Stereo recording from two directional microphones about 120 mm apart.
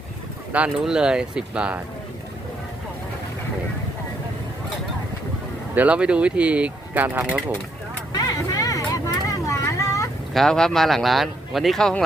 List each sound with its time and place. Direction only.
0.5 s speech: 10° right (ahead or behind)
5.7 s speech: 10° right (ahead or behind)
8.1 s vehicle: 30° left (ahead or behind)
10.3 s speech: 5° left (ahead or behind)